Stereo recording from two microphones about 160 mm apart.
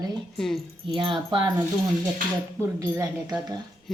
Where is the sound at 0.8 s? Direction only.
30° right (ahead or behind).